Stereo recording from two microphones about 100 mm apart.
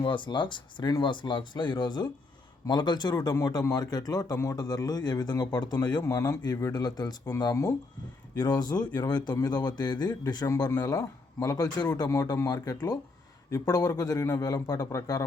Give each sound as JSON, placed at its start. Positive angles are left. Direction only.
{"t": 0.0, "sound": "a man's voice", "side_deg": 55}
{"t": 8.4, "sound": "a man's voice", "side_deg": 45}